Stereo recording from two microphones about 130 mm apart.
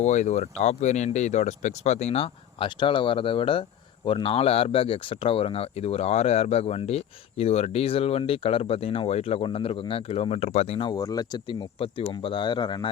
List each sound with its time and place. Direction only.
0.0 s speech: 65° left (ahead or behind)
10.8 s speech: 30° left (ahead or behind)